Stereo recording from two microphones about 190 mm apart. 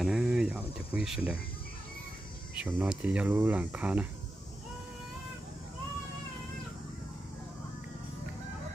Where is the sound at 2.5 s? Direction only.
5° right (ahead or behind).